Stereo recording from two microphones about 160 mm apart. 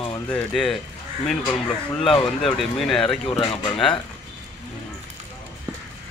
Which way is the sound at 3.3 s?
30° left (ahead or behind).